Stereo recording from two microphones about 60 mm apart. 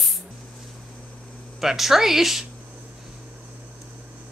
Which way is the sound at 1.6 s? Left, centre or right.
Centre.